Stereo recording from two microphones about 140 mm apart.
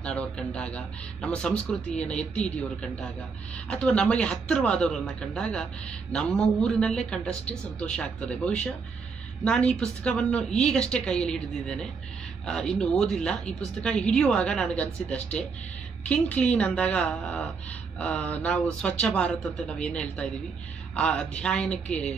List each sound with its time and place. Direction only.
0.0 s a woman's voice: 10° left (ahead or behind)